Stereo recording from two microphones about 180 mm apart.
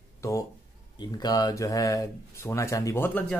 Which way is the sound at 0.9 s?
25° left (ahead or behind).